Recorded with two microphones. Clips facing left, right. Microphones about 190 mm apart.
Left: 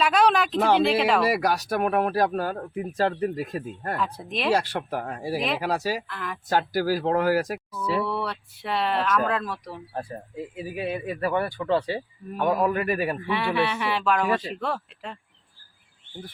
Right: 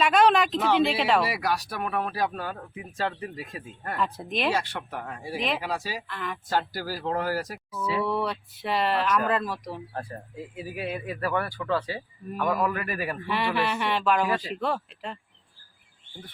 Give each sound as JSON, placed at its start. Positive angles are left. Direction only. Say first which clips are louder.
{"t": 0.0, "sound": "a sound", "louder": "even", "side_deg": 0}
{"t": 0.8, "sound": "speech", "louder": "left 2 dB", "side_deg": 0}
{"t": 1.2, "sound": "speech", "louder": "left 4 dB", "side_deg": 45}
{"t": 3.9, "sound": "speech", "louder": "right 2 dB", "side_deg": 0}
{"t": 4.5, "sound": "speech", "louder": "left 5 dB", "side_deg": 40}
{"t": 6.1, "sound": "speech", "louder": "even", "side_deg": 0}
{"t": 6.5, "sound": "speech", "louder": "left 7 dB", "side_deg": 50}
{"t": 8.0, "sound": "speech", "louder": "right 1 dB", "side_deg": 0}
{"t": 9.9, "sound": "a man's voice", "louder": "left 3 dB", "side_deg": 15}
{"t": 13.2, "sound": "speech", "louder": "right 1 dB", "side_deg": 0}